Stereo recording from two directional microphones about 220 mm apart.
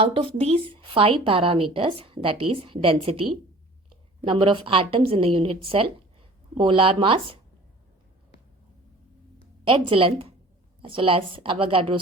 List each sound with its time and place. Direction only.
0.0 s a woman's voice: 25° right (ahead or behind)
9.6 s a woman's voice: 25° right (ahead or behind)